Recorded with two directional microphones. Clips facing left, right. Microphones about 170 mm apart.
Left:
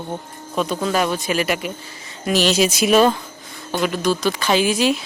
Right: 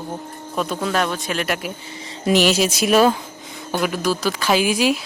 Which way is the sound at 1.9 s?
25° right (ahead or behind).